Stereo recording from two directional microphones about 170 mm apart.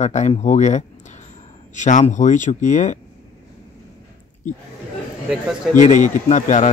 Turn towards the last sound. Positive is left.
turn(degrees=45)  # may be behind; listen again after turning